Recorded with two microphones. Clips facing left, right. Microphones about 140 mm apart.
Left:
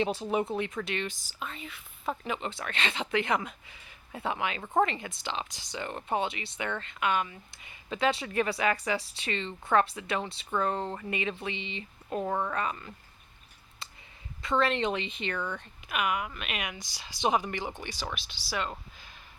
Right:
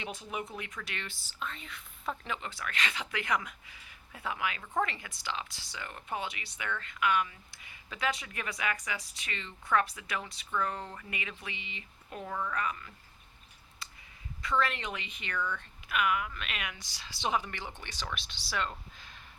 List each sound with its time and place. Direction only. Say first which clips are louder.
0.0 s speech: left 10 dB; 30° left (ahead or behind); by 2.1 s 5° left (ahead or behind)
2.2 s speech: left 4 dB; 20° left (ahead or behind)
13.8 s a sound: left 2 dB; 25° left (ahead or behind)
14.4 s a woman's voice: left 5 dB; 25° left (ahead or behind); by 19.2 s 5° left (ahead or behind)